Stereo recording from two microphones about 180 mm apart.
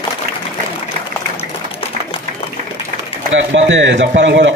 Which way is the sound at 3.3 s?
90° right.